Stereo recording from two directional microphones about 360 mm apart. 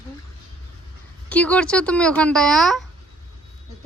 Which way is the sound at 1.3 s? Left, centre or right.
Centre.